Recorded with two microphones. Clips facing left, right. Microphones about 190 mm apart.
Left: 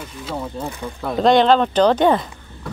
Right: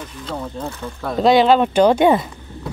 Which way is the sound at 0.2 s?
5° left (ahead or behind).